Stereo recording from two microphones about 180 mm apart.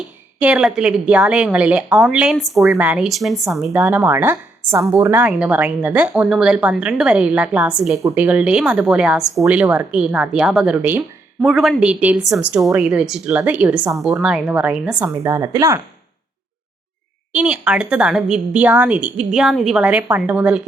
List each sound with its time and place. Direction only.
0.3 s a woman's voice: 5° right (ahead or behind)
15.1 s a woman's voice: 15° right (ahead or behind)
17.3 s a woman's voice: 5° right (ahead or behind)